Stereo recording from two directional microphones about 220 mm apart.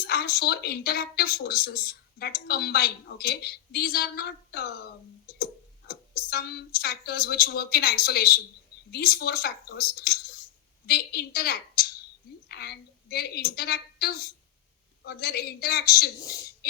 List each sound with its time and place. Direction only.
0.1 s speech: 45° left (ahead or behind)
5.9 s a woman's voice: 45° left (ahead or behind)
16.2 s speech: 15° left (ahead or behind)